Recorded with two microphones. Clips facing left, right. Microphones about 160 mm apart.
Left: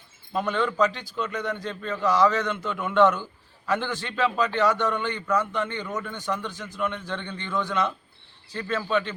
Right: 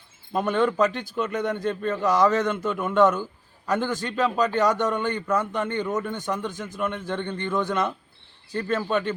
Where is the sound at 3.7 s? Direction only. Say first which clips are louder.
Right 2 dB; 45° right (ahead or behind).